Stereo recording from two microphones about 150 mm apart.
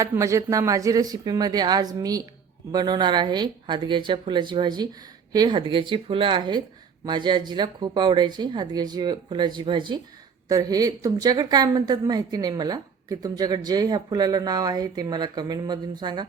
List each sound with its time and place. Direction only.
0.0 s a woman's voice: 20° right (ahead or behind)